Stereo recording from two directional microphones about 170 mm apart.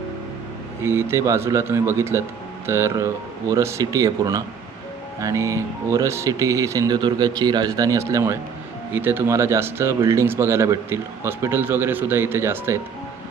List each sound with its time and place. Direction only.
0.8 s speech: 15° right (ahead or behind)